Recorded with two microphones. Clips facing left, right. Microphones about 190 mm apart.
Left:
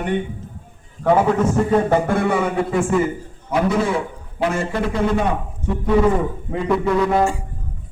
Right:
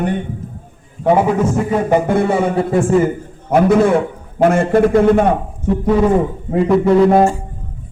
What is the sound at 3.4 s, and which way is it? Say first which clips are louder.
A man's voice: right 7 dB; 55° right (ahead or behind).